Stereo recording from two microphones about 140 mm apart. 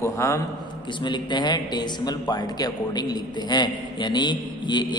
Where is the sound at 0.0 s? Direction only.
20° left (ahead or behind).